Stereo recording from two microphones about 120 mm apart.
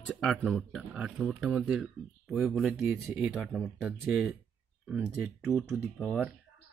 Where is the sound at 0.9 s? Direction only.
5° right (ahead or behind).